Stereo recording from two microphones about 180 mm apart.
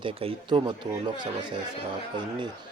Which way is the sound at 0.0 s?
30° right (ahead or behind).